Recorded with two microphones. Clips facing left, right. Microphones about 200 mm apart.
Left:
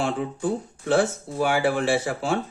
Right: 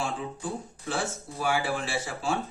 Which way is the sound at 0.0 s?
65° left (ahead or behind).